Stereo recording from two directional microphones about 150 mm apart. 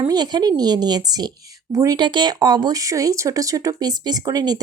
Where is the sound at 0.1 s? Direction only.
30° right (ahead or behind).